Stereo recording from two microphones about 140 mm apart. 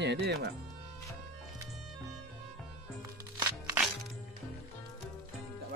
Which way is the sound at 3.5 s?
15° right (ahead or behind).